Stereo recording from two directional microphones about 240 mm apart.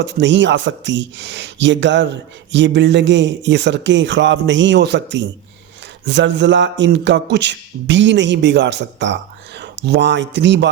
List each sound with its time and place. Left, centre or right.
0.0 s speech: right